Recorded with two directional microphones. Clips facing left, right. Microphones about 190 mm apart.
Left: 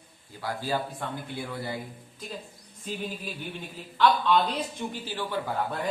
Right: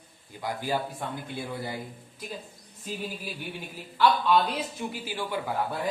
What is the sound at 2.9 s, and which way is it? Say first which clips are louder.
A man's voice: left 1 dB; 5° right (ahead or behind).